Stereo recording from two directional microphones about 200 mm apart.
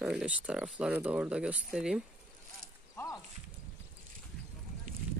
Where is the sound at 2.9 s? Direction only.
20° left (ahead or behind).